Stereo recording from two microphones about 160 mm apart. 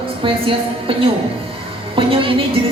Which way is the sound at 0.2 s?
35° right (ahead or behind).